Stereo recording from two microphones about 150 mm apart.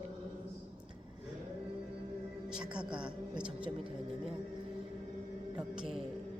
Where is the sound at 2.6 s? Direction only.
5° right (ahead or behind).